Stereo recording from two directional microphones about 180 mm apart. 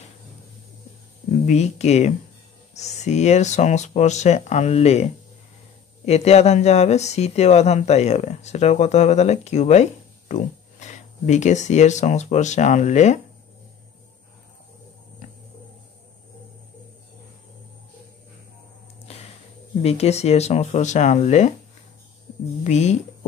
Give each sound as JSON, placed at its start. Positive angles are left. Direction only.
{"t": 1.4, "sound": "speech", "side_deg": 40}
{"t": 19.0, "sound": "a sound", "side_deg": 35}
{"t": 19.8, "sound": "speech", "side_deg": 35}
{"t": 22.6, "sound": "speech", "side_deg": 40}